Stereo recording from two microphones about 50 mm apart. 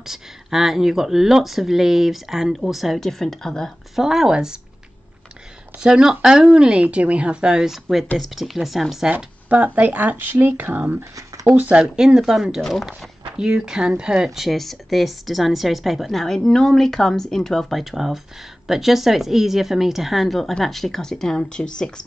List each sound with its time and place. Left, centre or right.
0.0 s speech: centre
3.9 s speech: centre
5.8 s speech: centre
9.1 s speech: right
11.9 s speech: centre